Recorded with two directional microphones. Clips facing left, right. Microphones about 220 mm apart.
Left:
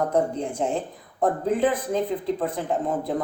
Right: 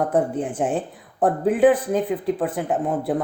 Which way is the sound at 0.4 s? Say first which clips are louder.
Right 2 dB; 15° right (ahead or behind).